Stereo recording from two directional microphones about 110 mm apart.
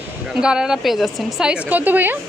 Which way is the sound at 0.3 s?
5° right (ahead or behind).